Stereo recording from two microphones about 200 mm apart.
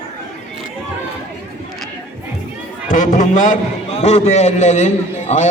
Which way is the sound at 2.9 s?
40° left (ahead or behind).